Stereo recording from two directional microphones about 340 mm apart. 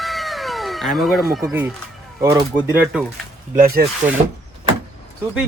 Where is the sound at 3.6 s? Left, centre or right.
Right.